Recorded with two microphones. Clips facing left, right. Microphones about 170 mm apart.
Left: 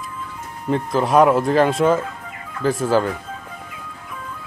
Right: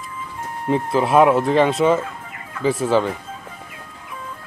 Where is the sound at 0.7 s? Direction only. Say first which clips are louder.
Right 1 dB; 5° right (ahead or behind).